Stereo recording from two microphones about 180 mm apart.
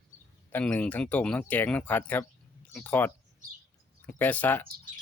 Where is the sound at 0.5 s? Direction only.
10° left (ahead or behind).